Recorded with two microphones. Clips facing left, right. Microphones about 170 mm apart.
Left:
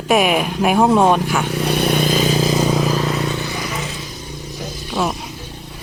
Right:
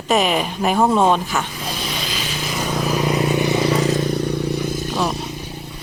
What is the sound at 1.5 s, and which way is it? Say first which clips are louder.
Vehicle: left 10 dB; 70° left (ahead or behind).